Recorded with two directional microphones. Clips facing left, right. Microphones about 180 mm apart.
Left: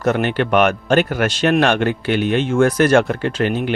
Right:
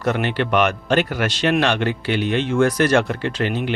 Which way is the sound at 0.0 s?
45° left (ahead or behind).